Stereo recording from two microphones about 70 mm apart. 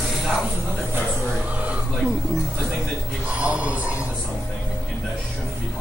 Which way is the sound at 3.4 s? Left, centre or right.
Centre.